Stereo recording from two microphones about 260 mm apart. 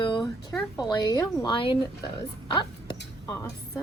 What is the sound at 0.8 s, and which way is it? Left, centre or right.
A woman's voice, centre.